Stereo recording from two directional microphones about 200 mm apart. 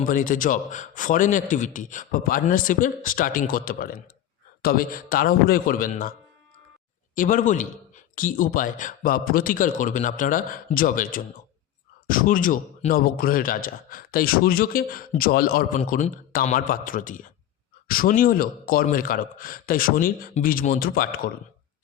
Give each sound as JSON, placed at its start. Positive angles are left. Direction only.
{"t": 0.1, "sound": "a man's voice", "side_deg": 40}
{"t": 7.2, "sound": "a man's voice", "side_deg": 40}